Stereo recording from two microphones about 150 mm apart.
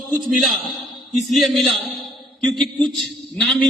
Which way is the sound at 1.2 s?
Centre (ahead or behind).